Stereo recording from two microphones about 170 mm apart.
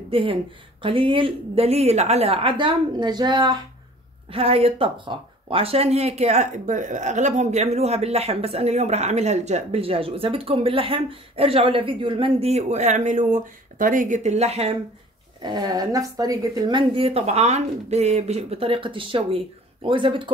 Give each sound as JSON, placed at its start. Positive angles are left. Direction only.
{"t": 0.1, "sound": "speech", "side_deg": -30}
{"t": 15.4, "sound": "speech", "side_deg": -25}